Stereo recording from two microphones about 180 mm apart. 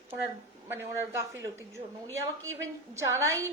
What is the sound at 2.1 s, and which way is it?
Speech, 90° right.